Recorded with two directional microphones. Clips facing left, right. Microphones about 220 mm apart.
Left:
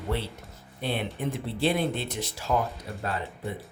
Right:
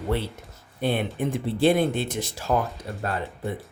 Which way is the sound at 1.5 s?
50° right (ahead or behind).